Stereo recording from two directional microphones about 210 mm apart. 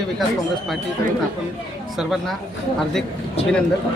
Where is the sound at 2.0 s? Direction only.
Centre (ahead or behind).